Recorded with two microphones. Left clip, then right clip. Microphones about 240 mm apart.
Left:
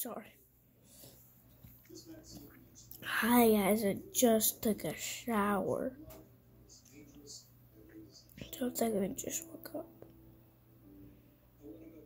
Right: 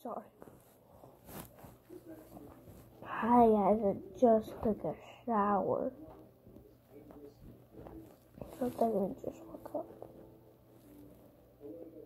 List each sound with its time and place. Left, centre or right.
0.0 s speech: centre
3.0 s a woman's voice: left
8.4 s a woman's voice: left